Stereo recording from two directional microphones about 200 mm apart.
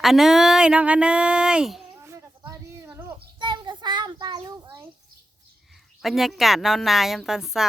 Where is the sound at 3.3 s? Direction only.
25° right (ahead or behind).